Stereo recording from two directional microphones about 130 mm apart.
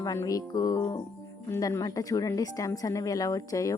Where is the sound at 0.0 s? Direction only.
25° left (ahead or behind).